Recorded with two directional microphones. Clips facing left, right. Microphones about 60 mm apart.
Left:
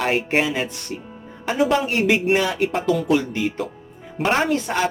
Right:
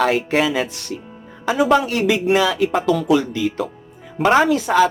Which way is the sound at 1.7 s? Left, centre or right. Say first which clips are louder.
Right 3 dB; right.